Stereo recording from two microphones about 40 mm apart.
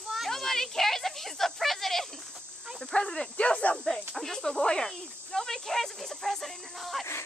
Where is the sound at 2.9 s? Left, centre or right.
Left.